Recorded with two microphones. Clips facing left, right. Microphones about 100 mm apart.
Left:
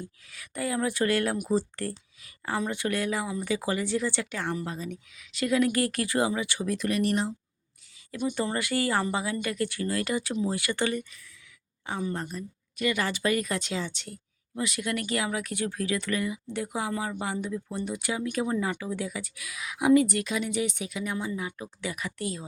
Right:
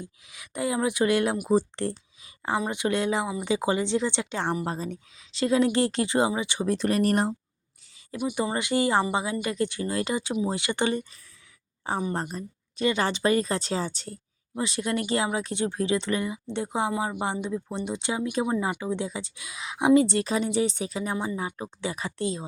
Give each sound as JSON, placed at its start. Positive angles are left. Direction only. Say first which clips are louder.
{"t": 0.0, "sound": "speech", "louder": "even", "side_deg": -20}
{"t": 7.0, "sound": "speech", "louder": "right 3 dB", "side_deg": -50}
{"t": 8.1, "sound": "speech", "louder": "right 1 dB", "side_deg": -10}
{"t": 8.5, "sound": "speech", "louder": "right 3 dB", "side_deg": -20}